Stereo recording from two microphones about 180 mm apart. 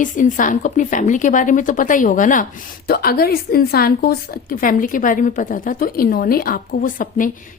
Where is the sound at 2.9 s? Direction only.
55° left (ahead or behind).